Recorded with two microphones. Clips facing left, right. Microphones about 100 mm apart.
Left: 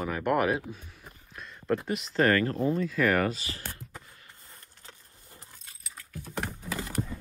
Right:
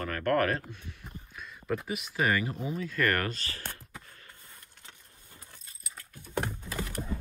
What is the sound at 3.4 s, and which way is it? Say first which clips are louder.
Speech: left 1 dB; 15° left (ahead or behind).